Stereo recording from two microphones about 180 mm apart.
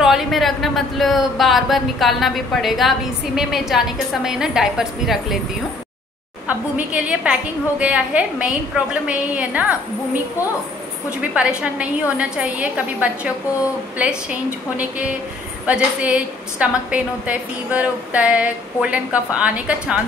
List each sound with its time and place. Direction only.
0.0 s speech: centre (ahead or behind)
6.9 s a woman's voice: 5° right (ahead or behind)
11.1 s a woman's voice: 5° right (ahead or behind)